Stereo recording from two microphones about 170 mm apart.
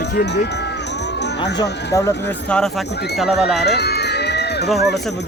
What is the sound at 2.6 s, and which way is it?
Speech, centre (ahead or behind).